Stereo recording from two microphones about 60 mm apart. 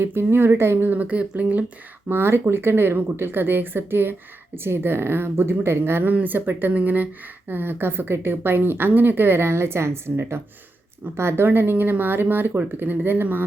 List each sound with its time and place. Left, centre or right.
0.0 s speech: right
2.0 s speech: right